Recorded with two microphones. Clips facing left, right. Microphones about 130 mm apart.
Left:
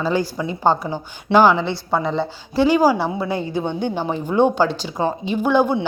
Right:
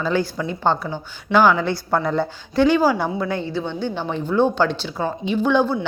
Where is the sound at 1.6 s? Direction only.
Centre (ahead or behind).